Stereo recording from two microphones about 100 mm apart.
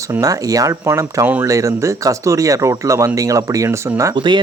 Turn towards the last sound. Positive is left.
turn(degrees=-55)  # may be behind; listen again after turning